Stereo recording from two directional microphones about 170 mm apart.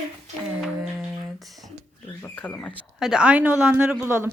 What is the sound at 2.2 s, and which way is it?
Speech, 10° left (ahead or behind).